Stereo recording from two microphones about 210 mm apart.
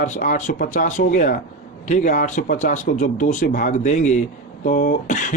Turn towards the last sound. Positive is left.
turn(degrees=35)  # may be behind; listen again after turning